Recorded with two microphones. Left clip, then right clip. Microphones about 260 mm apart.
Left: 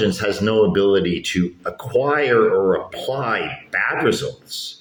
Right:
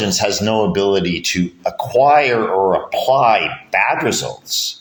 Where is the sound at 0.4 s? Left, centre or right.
Right.